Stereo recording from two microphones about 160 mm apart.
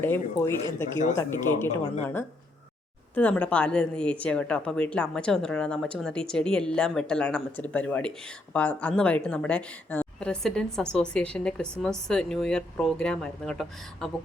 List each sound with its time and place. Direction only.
0.0 s a woman's voice: 15° left (ahead or behind)